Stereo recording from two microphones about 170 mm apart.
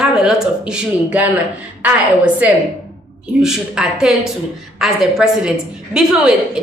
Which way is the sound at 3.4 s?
5° right (ahead or behind).